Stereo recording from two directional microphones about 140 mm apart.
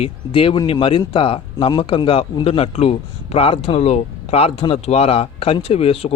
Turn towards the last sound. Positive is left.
turn(degrees=45)  # may be behind; listen again after turning